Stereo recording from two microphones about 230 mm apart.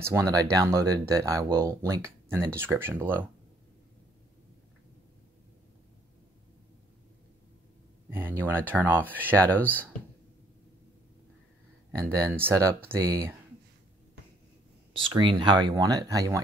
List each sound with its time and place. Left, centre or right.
0.0 s speech: centre
8.1 s speech: centre
11.9 s speech: centre
15.0 s speech: right